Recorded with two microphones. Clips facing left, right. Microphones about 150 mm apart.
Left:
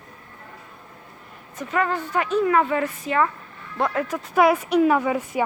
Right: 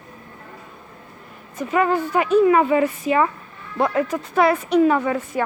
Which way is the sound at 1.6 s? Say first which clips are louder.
Right 5 dB; 10° right (ahead or behind).